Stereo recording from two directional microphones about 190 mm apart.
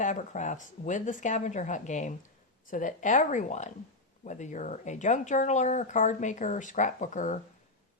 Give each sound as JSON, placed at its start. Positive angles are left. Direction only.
{"t": 0.0, "sound": "speech", "side_deg": 40}